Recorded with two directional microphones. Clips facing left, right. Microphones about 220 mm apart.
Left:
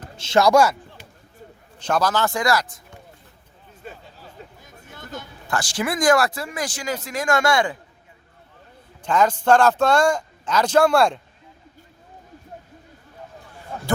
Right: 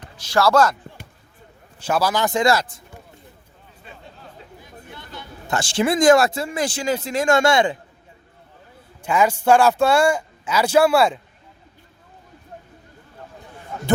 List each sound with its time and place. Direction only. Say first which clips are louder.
0.2 s speech: left 1 dB; 20° left (ahead or behind)
1.8 s speech: right 1 dB; 10° right (ahead or behind); by 2.8 s 25° right (ahead or behind)
4.6 s a sound: right 2 dB; 45° left (ahead or behind)
5.5 s speech: right 5 dB; 25° right (ahead or behind)
9.0 s speech: even; 10° right (ahead or behind)